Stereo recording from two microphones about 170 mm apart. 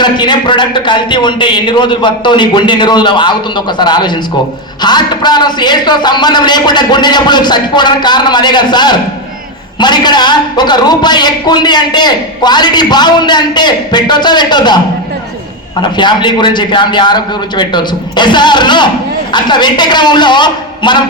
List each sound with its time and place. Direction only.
0.0 s a man's voice: 25° left (ahead or behind)
15.8 s a man's voice: 25° left (ahead or behind)